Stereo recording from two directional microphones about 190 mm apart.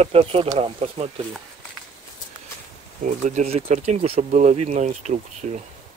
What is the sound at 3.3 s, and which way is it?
Speech, 35° right (ahead or behind).